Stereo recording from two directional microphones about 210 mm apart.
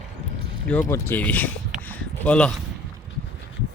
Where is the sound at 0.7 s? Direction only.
10° left (ahead or behind).